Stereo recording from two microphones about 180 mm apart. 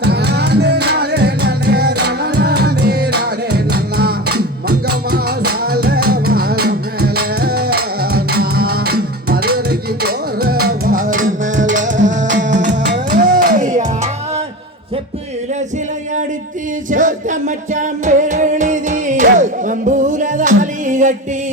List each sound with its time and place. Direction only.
0.0 s music: 65° right (ahead or behind); by 12.7 s 45° right (ahead or behind)
12.8 s music: 75° right (ahead or behind)
13.2 s music: 50° right (ahead or behind)
16.9 s singing: 45° right (ahead or behind)
17.7 s music: 45° right (ahead or behind)